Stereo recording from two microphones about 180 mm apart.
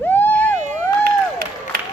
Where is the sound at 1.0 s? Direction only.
55° right (ahead or behind).